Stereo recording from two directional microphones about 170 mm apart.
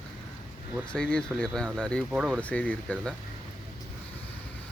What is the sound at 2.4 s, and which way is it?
Speech, 10° left (ahead or behind).